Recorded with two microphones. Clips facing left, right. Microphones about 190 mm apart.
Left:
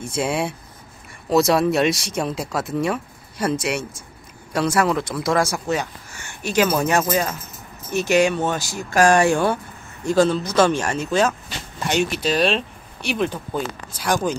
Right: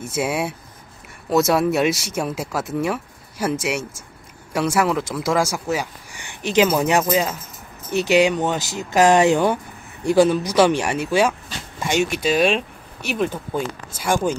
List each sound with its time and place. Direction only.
0.0 s speech: 5° right (ahead or behind)